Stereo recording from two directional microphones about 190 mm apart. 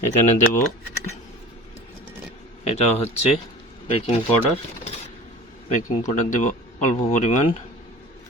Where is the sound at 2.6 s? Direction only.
35° left (ahead or behind).